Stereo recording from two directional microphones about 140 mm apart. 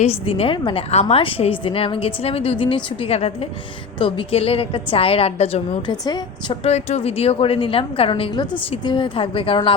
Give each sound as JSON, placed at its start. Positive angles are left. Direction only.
{"t": 0.0, "sound": "a woman's voice", "side_deg": 45}
{"t": 5.9, "sound": "a woman's voice", "side_deg": 30}
{"t": 6.7, "sound": "a woman's voice", "side_deg": 50}